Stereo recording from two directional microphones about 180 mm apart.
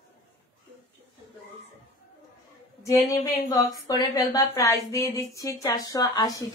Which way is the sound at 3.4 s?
20° left (ahead or behind).